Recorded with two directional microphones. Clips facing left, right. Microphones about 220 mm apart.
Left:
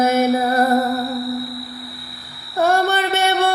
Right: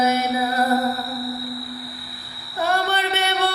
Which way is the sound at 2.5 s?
45° left (ahead or behind).